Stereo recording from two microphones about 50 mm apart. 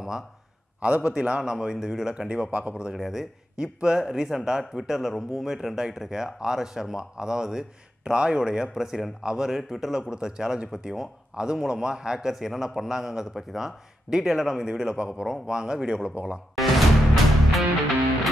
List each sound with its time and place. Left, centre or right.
0.7 s a man's voice: right
2.9 s speech: centre
16.5 s music: centre